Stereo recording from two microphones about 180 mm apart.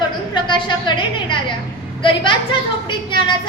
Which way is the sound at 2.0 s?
25° left (ahead or behind).